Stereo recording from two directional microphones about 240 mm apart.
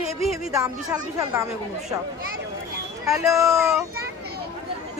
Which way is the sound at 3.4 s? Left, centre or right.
Centre.